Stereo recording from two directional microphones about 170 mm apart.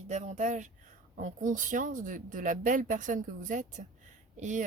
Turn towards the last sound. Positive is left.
turn(degrees=-45)  # may be behind; listen again after turning